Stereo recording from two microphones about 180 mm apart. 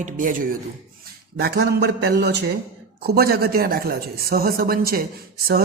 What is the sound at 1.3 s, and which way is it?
Speech, 60° right (ahead or behind).